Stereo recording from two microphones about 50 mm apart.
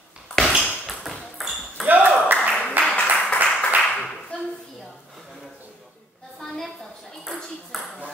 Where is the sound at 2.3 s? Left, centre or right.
Centre.